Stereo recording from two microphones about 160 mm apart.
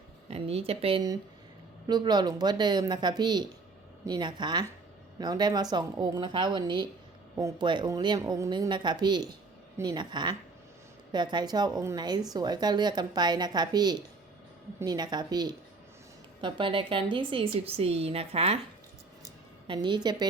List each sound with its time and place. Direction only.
0.3 s a woman's voice: 40° right (ahead or behind)
1.9 s a woman's voice: 25° right (ahead or behind)
19.2 s a sound: 30° right (ahead or behind)